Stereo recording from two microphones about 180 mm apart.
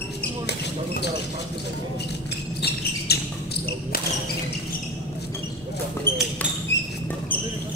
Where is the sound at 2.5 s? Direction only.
65° left (ahead or behind).